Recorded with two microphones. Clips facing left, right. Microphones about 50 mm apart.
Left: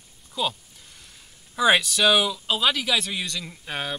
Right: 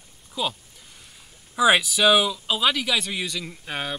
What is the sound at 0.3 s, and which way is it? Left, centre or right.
Speech, centre.